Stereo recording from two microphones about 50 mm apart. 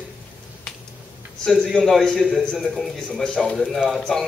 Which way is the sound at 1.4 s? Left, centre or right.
Centre.